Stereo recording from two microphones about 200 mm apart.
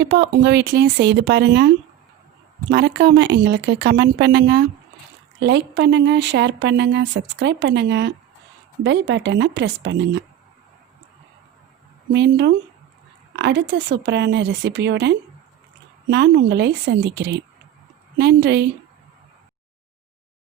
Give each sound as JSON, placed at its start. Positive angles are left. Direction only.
{"t": 0.0, "sound": "speech", "side_deg": -60}
{"t": 12.1, "sound": "speech", "side_deg": -60}